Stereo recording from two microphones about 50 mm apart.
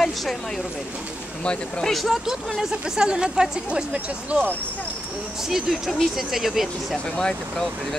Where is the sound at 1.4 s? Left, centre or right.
Left.